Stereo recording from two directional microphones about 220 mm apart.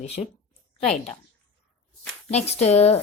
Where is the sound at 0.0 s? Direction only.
30° left (ahead or behind).